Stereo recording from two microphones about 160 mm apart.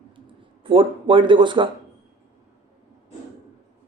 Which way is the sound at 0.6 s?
30° right (ahead or behind).